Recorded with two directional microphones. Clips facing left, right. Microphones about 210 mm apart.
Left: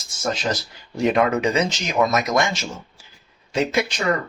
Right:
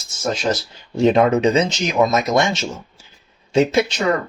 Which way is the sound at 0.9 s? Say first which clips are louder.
Right 5 dB; 25° right (ahead or behind).